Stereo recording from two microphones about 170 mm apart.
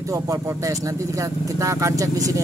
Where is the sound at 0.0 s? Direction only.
20° right (ahead or behind).